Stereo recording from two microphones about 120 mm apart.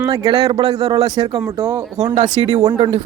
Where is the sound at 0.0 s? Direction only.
30° right (ahead or behind).